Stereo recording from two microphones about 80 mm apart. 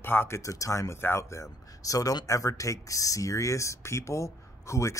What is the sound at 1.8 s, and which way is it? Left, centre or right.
Speech, left.